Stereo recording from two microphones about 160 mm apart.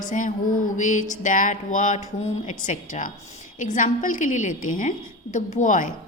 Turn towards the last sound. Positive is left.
turn(degrees=55)  # may be behind; listen again after turning